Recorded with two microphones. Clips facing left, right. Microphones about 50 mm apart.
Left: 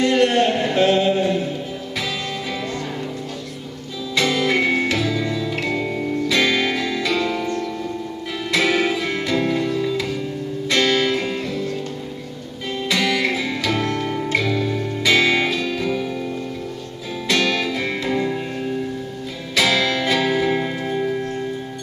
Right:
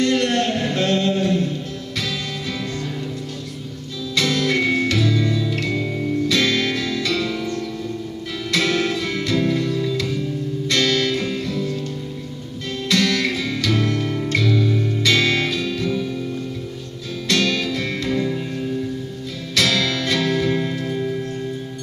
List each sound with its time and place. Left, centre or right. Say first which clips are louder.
0.0 s music: left 3 dB; centre
4.1 s music: left 1 dB; centre
12.8 s music: even; centre
17.3 s music: left 1 dB; centre